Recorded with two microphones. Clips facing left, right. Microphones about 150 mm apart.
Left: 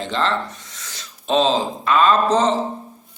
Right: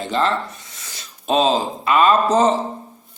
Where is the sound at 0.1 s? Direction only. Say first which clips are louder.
Right 3 dB; 10° right (ahead or behind).